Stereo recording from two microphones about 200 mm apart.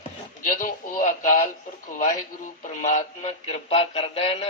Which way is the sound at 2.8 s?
35° left (ahead or behind).